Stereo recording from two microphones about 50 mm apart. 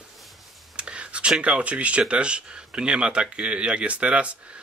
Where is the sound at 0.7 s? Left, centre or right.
Right.